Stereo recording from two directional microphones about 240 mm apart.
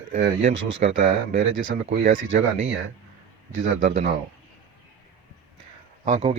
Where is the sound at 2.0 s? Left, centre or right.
Right.